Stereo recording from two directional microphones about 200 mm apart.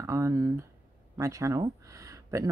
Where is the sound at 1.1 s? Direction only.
15° right (ahead or behind).